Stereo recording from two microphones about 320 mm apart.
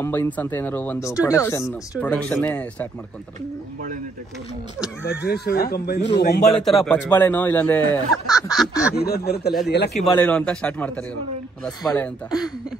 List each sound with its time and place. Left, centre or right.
0.0 s speech: centre
5.0 s speech: left
6.5 s speech: centre
8.9 s speech: left
10.1 s speech: centre